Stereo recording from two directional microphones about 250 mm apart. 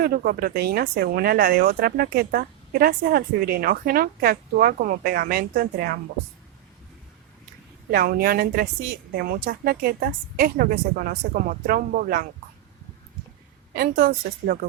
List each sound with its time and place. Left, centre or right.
0.0 s speech: right
7.9 s speech: right
13.7 s speech: right